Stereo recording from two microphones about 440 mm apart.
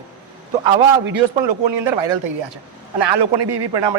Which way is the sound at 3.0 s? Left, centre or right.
Right.